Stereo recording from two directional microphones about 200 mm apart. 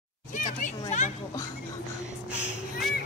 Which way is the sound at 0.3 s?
40° left (ahead or behind).